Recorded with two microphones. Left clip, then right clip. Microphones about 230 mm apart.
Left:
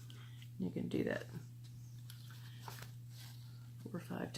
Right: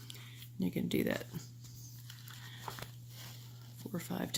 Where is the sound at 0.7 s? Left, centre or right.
Right.